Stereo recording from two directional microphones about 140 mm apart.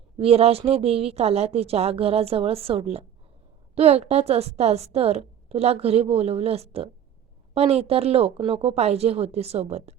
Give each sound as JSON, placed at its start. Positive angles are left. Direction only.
{"t": 0.2, "sound": "a woman's voice", "side_deg": -45}